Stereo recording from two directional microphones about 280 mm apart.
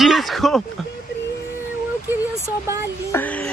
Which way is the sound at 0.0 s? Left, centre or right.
Centre.